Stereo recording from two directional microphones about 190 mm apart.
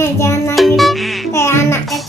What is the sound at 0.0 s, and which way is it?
Music, 15° left (ahead or behind).